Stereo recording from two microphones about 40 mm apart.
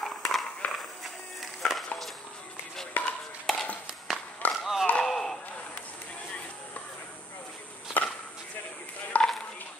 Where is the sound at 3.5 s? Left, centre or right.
Centre.